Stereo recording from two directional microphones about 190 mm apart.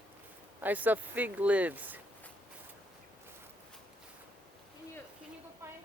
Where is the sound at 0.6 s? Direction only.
10° right (ahead or behind).